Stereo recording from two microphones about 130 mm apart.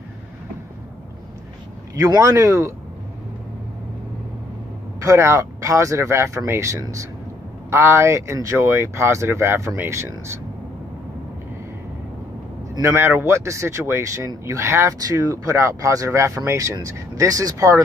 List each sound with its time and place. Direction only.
2.0 s speech: 25° right (ahead or behind)
5.0 s speech: 20° right (ahead or behind)
12.8 s speech: 20° right (ahead or behind)